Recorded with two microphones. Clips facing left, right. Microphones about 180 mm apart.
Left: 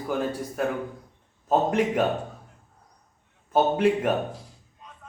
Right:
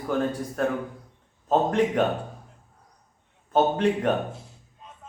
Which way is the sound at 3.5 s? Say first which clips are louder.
Left 1 dB; 5° left (ahead or behind).